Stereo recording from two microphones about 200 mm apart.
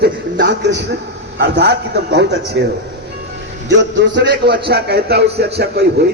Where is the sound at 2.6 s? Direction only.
65° right (ahead or behind).